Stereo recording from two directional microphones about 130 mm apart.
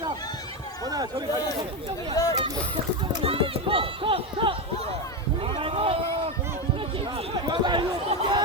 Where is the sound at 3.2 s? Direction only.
45° right (ahead or behind).